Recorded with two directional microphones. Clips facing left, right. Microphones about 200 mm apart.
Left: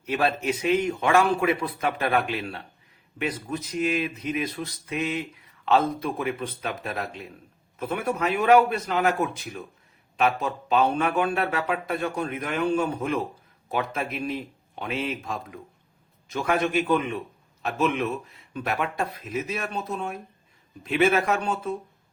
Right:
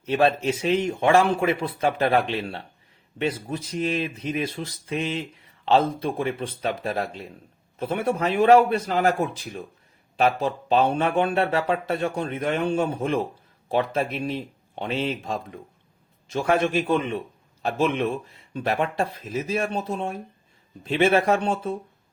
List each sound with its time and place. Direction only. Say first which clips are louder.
0.0 s speech: right 4 dB; 30° right (ahead or behind)